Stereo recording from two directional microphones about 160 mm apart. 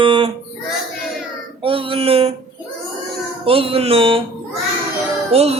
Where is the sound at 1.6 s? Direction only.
35° right (ahead or behind).